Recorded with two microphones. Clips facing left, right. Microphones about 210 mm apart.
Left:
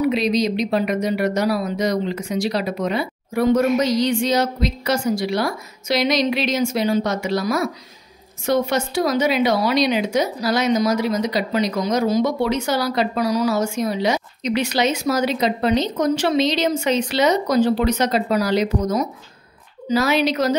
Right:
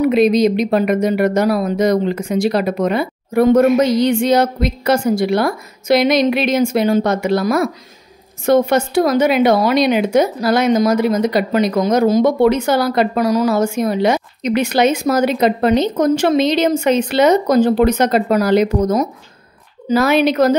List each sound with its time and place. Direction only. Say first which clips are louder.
0.0 s a woman's voice: right 6 dB; 50° right (ahead or behind)